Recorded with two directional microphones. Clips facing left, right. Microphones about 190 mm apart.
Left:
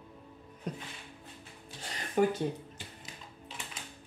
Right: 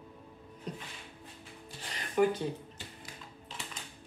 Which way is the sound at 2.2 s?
45° left (ahead or behind).